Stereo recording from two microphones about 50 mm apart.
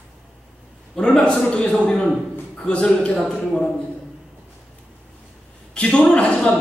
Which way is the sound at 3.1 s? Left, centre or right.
Centre.